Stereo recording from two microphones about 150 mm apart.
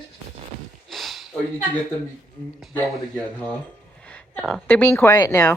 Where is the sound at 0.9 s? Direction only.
Centre (ahead or behind).